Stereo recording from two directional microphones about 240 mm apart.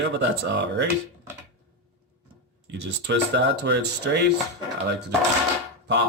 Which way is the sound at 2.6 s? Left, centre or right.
Right.